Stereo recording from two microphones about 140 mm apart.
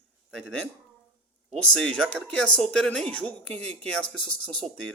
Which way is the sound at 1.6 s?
5° left (ahead or behind).